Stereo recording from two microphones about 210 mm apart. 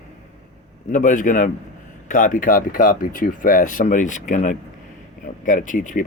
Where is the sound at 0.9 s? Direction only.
35° left (ahead or behind).